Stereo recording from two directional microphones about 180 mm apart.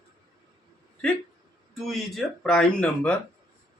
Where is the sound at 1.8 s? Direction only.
Centre (ahead or behind).